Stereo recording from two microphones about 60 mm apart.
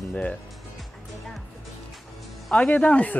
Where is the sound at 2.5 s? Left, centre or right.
Left.